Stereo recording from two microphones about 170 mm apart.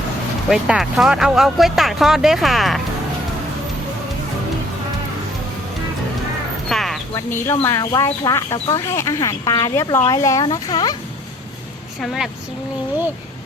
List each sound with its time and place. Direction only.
0.5 s speech: 5° right (ahead or behind)
6.7 s a sound: centre (ahead or behind)
7.3 s speech: 15° left (ahead or behind)
12.0 s speech: centre (ahead or behind)